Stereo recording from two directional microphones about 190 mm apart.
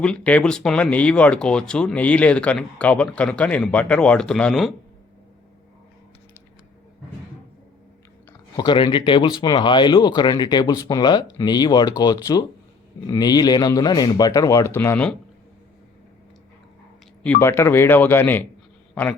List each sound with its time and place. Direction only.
0.0 s speech: 5° left (ahead or behind)
8.3 s speech: 20° left (ahead or behind)
17.2 s speech: 10° left (ahead or behind)